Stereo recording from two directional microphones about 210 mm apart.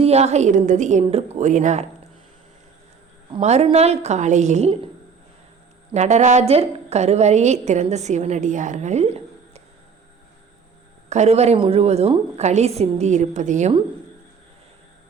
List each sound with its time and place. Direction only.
0.0 s a woman's voice: 30° right (ahead or behind)
3.3 s a woman's voice: 30° right (ahead or behind)
5.9 s a woman's voice: 35° right (ahead or behind)
11.1 s a woman's voice: 30° right (ahead or behind)